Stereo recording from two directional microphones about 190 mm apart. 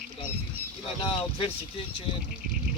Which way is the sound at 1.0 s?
30° left (ahead or behind).